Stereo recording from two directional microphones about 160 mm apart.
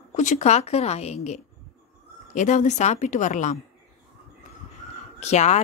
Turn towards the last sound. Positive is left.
turn(degrees=45)  # may be behind; listen again after turning